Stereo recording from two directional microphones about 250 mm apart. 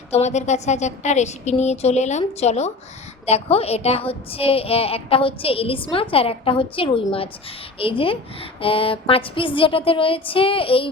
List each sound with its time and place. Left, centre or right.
0.1 s a woman's voice: left